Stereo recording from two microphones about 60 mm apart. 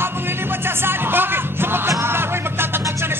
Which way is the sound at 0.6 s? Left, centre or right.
Right.